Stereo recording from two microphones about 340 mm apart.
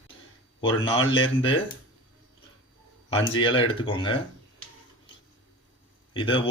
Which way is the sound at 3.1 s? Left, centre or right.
Centre.